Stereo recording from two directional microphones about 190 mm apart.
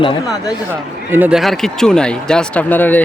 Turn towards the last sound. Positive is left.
turn(degrees=10)  # may be behind; listen again after turning